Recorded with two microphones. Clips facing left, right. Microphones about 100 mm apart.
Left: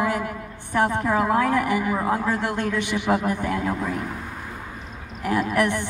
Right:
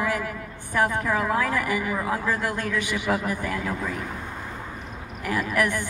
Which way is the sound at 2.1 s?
20° left (ahead or behind).